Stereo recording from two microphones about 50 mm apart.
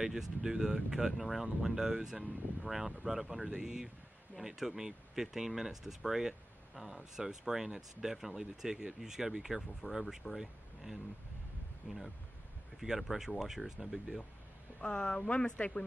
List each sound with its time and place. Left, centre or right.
0.0 s speech: centre
11.9 s speech: centre
14.8 s speech: centre